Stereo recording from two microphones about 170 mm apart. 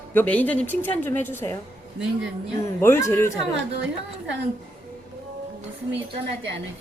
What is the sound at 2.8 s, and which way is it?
Speech, 15° left (ahead or behind).